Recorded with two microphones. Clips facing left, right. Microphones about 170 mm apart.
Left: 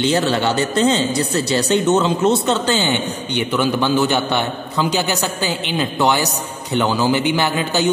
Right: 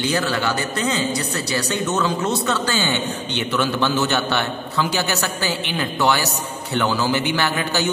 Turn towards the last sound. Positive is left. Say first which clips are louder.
# left 3 dB
turn(degrees=15)  # may be behind; listen again after turning